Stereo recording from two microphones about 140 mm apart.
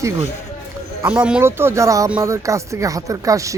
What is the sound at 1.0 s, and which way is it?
Speech, 10° right (ahead or behind).